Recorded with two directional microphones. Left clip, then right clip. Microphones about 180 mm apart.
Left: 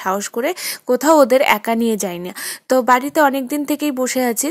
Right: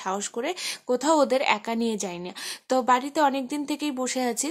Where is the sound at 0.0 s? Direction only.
30° left (ahead or behind).